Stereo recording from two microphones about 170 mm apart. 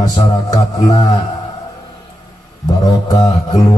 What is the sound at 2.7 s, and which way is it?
Speech, 20° left (ahead or behind).